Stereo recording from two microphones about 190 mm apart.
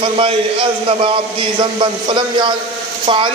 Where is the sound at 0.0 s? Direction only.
30° right (ahead or behind).